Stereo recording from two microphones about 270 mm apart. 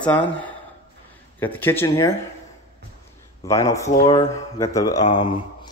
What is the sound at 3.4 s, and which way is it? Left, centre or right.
Speech, centre.